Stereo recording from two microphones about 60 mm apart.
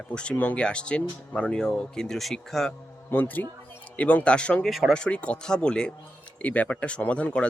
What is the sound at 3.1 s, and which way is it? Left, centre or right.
Speech, left.